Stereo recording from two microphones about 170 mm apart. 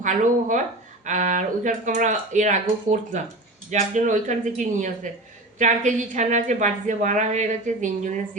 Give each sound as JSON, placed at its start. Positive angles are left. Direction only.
{"t": 0.0, "sound": "a woman's voice", "side_deg": -50}